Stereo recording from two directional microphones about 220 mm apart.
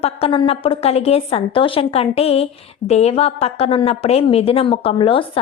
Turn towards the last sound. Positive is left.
turn(degrees=25)  # may be behind; listen again after turning